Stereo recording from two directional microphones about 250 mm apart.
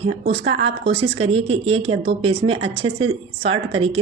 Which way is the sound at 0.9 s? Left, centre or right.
Right.